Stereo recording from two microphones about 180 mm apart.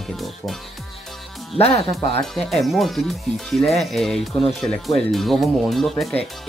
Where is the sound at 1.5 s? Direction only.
35° left (ahead or behind).